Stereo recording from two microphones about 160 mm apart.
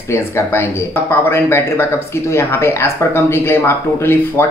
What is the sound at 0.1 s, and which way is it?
Speech, 15° left (ahead or behind).